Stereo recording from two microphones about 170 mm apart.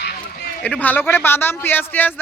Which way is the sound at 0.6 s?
10° left (ahead or behind).